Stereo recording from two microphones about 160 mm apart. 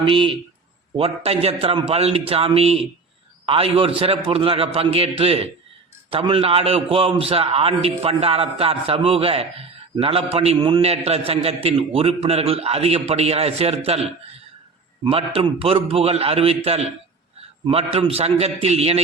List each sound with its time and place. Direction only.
0.0 s a man's voice: 35° right (ahead or behind)